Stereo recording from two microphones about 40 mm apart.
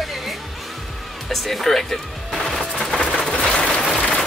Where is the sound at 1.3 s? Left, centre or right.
Centre.